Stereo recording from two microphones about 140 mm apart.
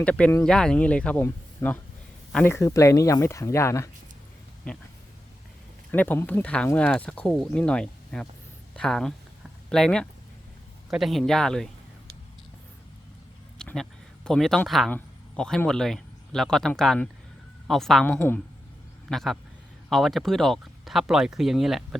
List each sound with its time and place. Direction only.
0.0 s speech: 10° left (ahead or behind)
4.7 s speech: 5° left (ahead or behind)
5.9 s speech: 15° left (ahead or behind)
13.6 s a sound: 5° left (ahead or behind)
14.3 s speech: centre (ahead or behind)
19.0 s a man's voice: centre (ahead or behind)